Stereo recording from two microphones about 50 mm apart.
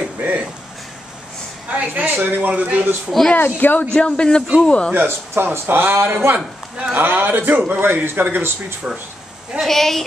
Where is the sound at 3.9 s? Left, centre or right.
Centre.